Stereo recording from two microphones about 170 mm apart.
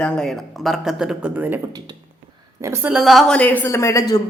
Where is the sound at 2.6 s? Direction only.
15° right (ahead or behind); by 4.2 s 20° left (ahead or behind).